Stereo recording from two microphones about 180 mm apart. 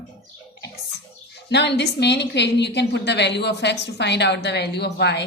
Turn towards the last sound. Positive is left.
turn(degrees=70)  # may be behind; listen again after turning